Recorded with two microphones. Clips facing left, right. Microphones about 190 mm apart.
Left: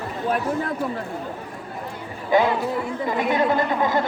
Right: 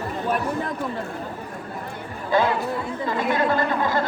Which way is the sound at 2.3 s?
20° left (ahead or behind).